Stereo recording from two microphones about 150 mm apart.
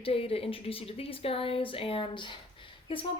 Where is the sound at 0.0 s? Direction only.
40° left (ahead or behind).